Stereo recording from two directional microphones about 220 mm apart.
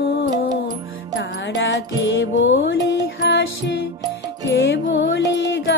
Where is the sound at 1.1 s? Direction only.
55° left (ahead or behind).